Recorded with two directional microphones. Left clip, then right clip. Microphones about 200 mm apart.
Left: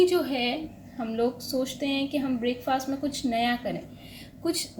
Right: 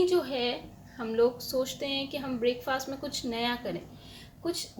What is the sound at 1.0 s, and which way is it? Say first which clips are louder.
A woman's voice: right 2 dB; 30° right (ahead or behind).